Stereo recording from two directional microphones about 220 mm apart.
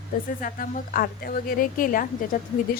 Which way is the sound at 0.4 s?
40° left (ahead or behind).